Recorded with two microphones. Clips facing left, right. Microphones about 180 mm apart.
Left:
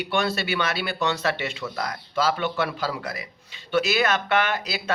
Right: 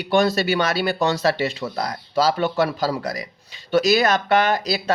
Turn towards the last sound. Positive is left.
turn(degrees=-35)  # may be behind; listen again after turning